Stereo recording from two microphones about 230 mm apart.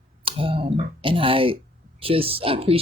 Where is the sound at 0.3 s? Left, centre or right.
Right.